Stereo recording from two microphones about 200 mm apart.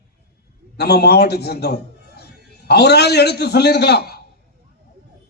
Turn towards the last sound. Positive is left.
turn(degrees=55)  # may be behind; listen again after turning